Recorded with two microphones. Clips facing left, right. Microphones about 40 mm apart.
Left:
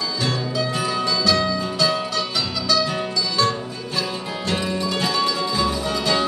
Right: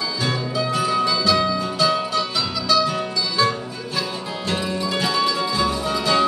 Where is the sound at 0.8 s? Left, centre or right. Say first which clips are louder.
Right 2 dB; centre.